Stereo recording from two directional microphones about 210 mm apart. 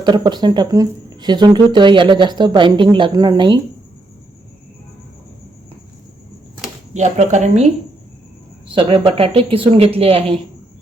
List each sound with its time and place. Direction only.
0.0 s speech: 20° right (ahead or behind)
6.9 s speech: 35° right (ahead or behind)
8.7 s speech: 25° right (ahead or behind)